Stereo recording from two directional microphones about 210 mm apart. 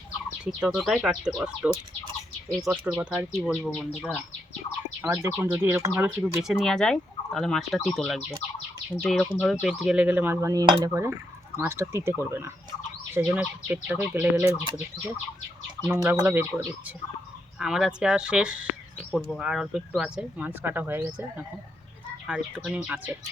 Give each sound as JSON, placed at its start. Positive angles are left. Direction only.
{"t": 0.4, "sound": "speech", "side_deg": -5}